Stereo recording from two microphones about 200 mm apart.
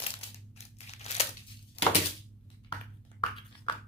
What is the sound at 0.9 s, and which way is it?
Crumpling, 30° left (ahead or behind).